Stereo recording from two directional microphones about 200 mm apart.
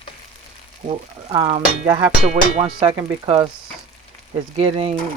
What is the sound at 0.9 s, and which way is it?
Speech, 25° right (ahead or behind).